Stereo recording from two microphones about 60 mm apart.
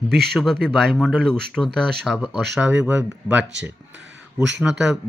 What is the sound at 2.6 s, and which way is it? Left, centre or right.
Speech, centre.